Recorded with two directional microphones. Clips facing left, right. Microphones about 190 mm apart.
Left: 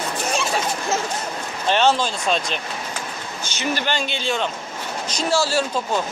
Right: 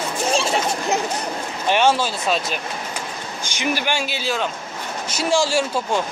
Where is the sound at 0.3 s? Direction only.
30° right (ahead or behind).